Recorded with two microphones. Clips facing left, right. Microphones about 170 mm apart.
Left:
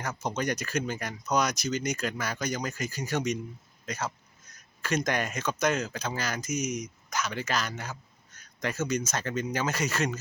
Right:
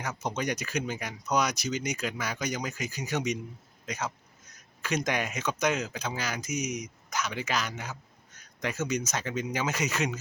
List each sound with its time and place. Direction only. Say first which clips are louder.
0.2 s speech: left 1 dB; 15° right (ahead or behind)
6.5 s speech: left 2 dB; 65° right (ahead or behind)
7.1 s speech: even; 15° right (ahead or behind)